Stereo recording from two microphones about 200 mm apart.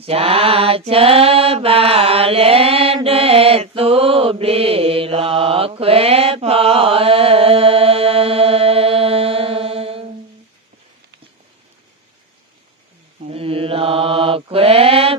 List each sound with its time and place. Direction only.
0.0 s mantra: 30° right (ahead or behind)
13.2 s mantra: 30° right (ahead or behind)